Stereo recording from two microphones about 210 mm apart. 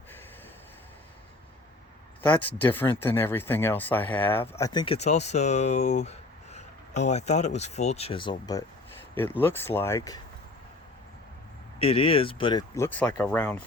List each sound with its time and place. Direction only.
2.6 s speech: 10° left (ahead or behind)
4.9 s speech: 30° left (ahead or behind)
9.1 s speech: 10° left (ahead or behind)
11.8 s speech: 25° left (ahead or behind); by 13.6 s 5° left (ahead or behind)